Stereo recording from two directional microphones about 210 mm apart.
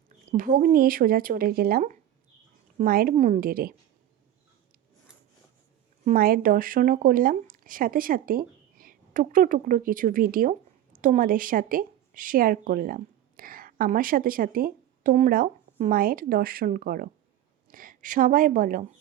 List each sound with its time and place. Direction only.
0.3 s speech: 40° right (ahead or behind)
6.1 s a woman's voice: 45° right (ahead or behind)